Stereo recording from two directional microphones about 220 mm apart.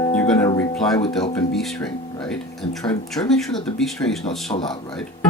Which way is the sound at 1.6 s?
Centre (ahead or behind).